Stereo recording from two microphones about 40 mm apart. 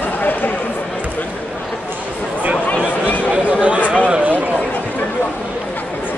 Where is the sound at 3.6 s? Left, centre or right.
Right.